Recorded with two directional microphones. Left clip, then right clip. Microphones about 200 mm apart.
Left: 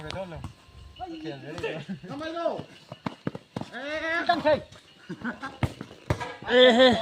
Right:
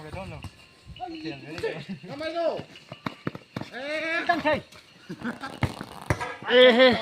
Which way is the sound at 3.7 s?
35° right (ahead or behind).